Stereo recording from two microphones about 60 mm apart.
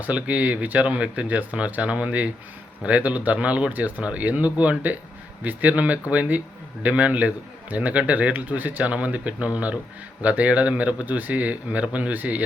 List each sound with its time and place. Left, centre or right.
0.0 s a man's voice: right